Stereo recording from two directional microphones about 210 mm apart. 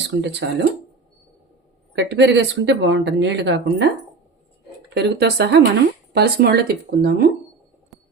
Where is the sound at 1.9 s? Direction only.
55° right (ahead or behind).